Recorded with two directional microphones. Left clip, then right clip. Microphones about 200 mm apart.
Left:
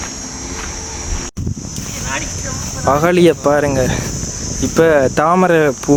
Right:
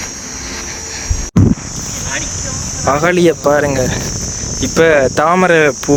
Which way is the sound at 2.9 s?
5° right (ahead or behind).